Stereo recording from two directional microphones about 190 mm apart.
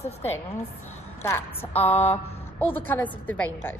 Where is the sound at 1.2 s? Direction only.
10° left (ahead or behind).